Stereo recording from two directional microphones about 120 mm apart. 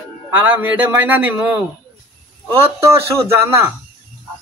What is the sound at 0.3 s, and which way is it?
A man's voice, 15° right (ahead or behind).